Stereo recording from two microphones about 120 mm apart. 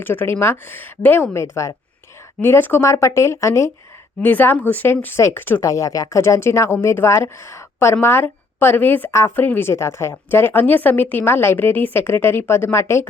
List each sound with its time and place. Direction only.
0.0 s a woman's voice: 15° left (ahead or behind)